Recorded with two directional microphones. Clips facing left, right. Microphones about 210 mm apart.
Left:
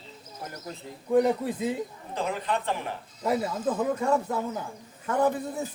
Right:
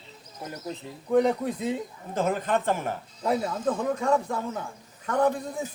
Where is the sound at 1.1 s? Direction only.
5° left (ahead or behind).